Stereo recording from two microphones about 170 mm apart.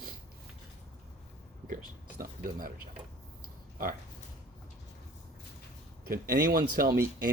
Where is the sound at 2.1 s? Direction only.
55° right (ahead or behind).